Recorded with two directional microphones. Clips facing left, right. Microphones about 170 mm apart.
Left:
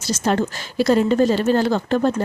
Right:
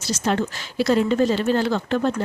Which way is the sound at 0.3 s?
40° left (ahead or behind).